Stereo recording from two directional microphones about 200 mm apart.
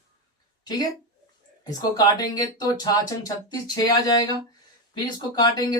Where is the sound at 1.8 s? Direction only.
20° left (ahead or behind).